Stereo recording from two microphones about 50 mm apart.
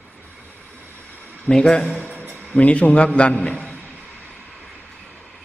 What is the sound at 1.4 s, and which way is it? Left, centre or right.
Speech, centre.